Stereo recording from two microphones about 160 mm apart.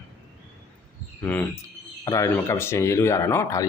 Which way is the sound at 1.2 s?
10° left (ahead or behind).